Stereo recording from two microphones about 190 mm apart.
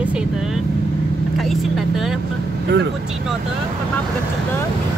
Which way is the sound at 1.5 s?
Centre (ahead or behind).